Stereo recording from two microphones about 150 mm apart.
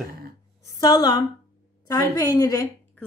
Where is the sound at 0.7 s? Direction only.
30° left (ahead or behind).